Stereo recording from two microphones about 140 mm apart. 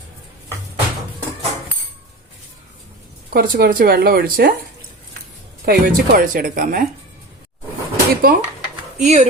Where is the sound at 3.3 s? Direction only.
90° right.